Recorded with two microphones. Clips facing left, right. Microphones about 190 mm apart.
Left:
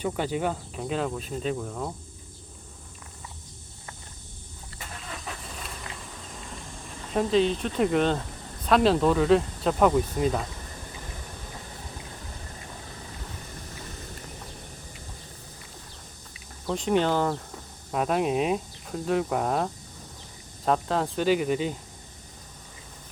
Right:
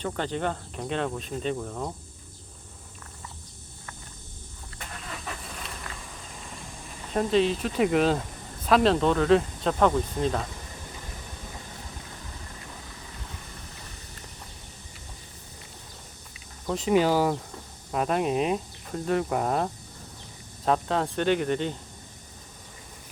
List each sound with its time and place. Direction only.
0.0 s speech: 10° left (ahead or behind)
5.0 s vehicle: centre (ahead or behind)
7.1 s speech: centre (ahead or behind)
16.6 s speech: centre (ahead or behind)